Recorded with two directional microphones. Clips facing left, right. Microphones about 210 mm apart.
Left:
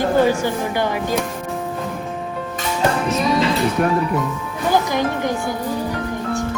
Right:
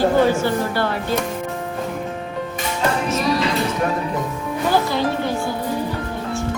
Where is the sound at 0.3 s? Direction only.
15° left (ahead or behind).